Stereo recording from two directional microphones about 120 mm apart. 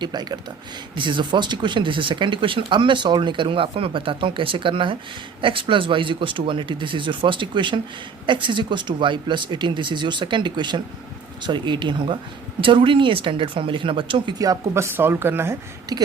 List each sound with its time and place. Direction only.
0.0 s speech: 35° right (ahead or behind)
14.3 s a woman's voice: 30° right (ahead or behind)
15.9 s speech: 30° right (ahead or behind)